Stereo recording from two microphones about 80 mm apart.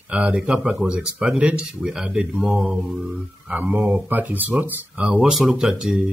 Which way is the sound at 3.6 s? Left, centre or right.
Centre.